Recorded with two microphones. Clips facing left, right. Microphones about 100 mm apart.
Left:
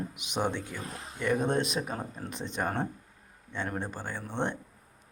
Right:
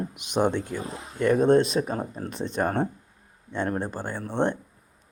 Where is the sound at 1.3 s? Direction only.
40° right (ahead or behind).